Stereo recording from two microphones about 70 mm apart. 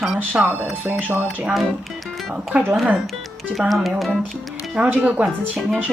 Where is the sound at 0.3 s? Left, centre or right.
Right.